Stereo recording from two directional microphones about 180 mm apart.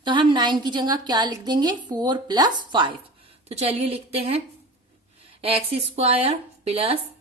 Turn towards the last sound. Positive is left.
turn(degrees=-35)  # may be behind; listen again after turning